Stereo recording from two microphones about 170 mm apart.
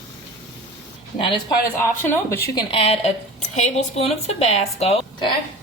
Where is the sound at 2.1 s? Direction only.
15° left (ahead or behind).